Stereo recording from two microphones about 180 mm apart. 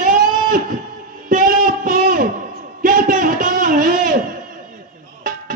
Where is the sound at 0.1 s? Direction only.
45° right (ahead or behind).